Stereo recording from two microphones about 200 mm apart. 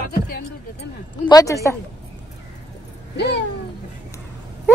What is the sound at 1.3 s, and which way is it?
Speech, 15° left (ahead or behind).